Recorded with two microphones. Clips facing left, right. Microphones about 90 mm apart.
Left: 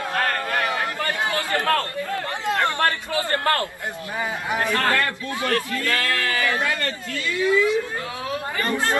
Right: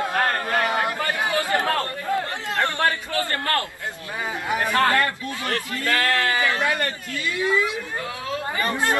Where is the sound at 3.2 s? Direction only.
20° left (ahead or behind).